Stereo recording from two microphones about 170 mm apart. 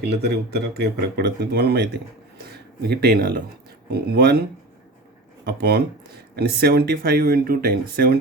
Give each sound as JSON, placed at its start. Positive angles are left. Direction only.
{"t": 0.0, "sound": "speech", "side_deg": -75}
{"t": 5.5, "sound": "speech", "side_deg": -70}